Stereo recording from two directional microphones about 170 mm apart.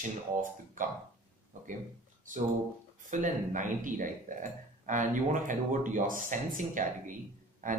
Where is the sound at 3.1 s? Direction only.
50° right (ahead or behind).